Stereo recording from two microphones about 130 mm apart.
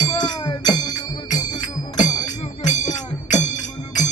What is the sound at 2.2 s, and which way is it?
Music, 70° left (ahead or behind).